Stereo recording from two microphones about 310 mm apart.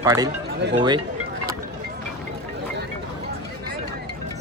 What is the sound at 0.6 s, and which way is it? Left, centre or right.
Speech, right.